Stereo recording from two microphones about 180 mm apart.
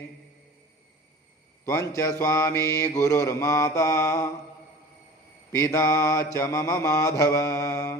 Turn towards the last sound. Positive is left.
turn(degrees=15)  # may be behind; listen again after turning